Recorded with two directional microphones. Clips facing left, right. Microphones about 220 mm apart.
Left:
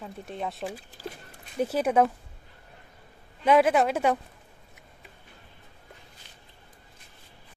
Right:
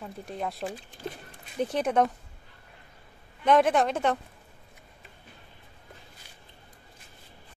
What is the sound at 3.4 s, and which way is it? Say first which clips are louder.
Speech: left 1 dB; 5° left (ahead or behind).